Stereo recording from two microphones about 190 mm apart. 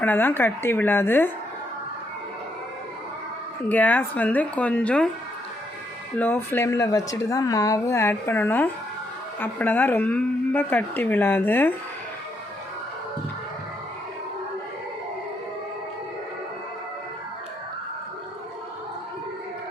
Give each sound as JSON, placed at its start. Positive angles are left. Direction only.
{"t": 0.0, "sound": "a woman's voice", "side_deg": 10}
{"t": 3.7, "sound": "a woman's voice", "side_deg": 10}
{"t": 6.1, "sound": "a woman's voice", "side_deg": 10}